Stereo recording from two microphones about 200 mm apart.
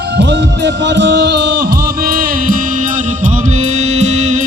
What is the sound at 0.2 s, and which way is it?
Music, 60° right (ahead or behind).